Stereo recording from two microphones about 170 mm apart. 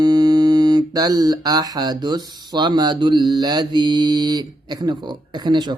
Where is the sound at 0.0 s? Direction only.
25° right (ahead or behind).